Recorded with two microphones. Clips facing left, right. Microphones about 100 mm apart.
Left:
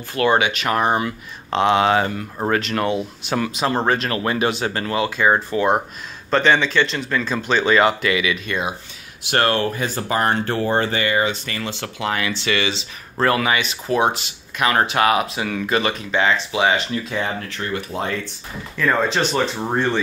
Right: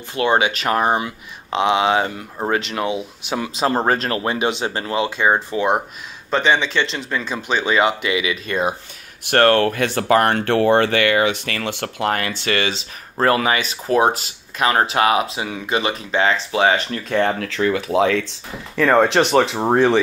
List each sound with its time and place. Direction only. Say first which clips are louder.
0.1 s speech: even; 25° right (ahead or behind)
1.0 s speech: left 3 dB; 15° right (ahead or behind)
3.5 s speech: right 3 dB; 35° right (ahead or behind)
4.2 s speech: even; 20° right (ahead or behind)
9.3 s speech: right 5 dB; 55° right (ahead or behind); by 15.9 s 20° right (ahead or behind)
15.9 s speech: right 1 dB; 30° right (ahead or behind); by 18.3 s 90° right
18.8 s speech: right 5 dB; 75° right (ahead or behind); by 20.0 s 90° right